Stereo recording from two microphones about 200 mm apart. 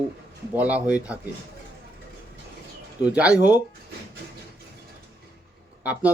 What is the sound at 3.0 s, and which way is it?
Speech, 5° right (ahead or behind).